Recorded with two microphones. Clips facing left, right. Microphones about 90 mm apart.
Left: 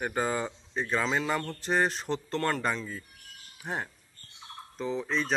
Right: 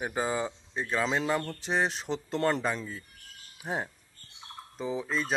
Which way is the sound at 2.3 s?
20° right (ahead or behind).